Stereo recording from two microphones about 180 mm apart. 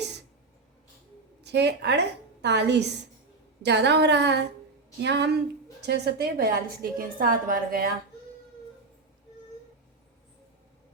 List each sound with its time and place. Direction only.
1.4 s a woman's voice: 70° right (ahead or behind); by 7.9 s 55° right (ahead or behind)